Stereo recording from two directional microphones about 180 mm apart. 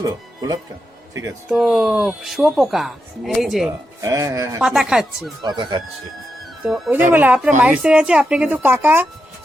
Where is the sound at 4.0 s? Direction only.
15° right (ahead or behind).